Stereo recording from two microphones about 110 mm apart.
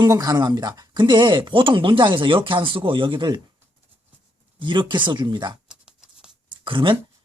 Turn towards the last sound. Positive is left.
turn(degrees=-50)  # may be behind; listen again after turning